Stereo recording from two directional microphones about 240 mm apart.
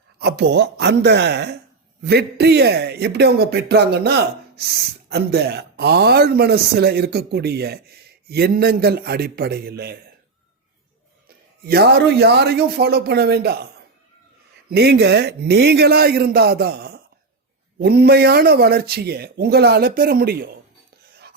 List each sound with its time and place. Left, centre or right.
0.2 s speech: right
11.3 s speech: right
14.7 s speech: right